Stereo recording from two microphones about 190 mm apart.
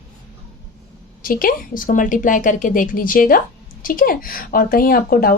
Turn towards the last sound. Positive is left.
turn(degrees=50)  # may be behind; listen again after turning